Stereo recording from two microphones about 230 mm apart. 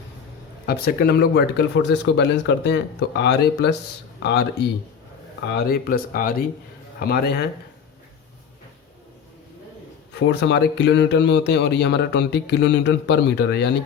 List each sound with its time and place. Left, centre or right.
0.6 s a man's voice: left
10.2 s a man's voice: left